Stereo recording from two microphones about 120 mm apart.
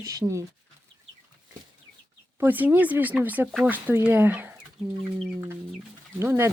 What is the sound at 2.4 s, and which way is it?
Speech, 15° right (ahead or behind).